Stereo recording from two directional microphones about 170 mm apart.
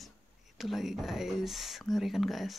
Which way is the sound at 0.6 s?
Centre (ahead or behind).